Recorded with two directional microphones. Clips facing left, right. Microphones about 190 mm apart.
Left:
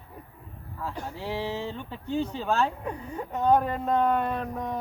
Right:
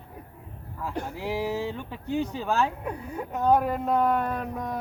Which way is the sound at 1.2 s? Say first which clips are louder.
Right 2 dB; 10° right (ahead or behind).